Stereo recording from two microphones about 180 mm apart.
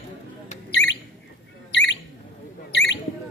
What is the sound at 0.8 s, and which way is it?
Bird, 90° left.